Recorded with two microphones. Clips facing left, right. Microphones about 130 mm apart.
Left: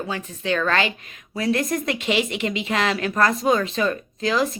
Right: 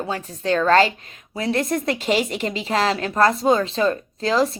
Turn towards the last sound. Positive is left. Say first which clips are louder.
# right 2 dB
turn(degrees=-30)  # may be behind; listen again after turning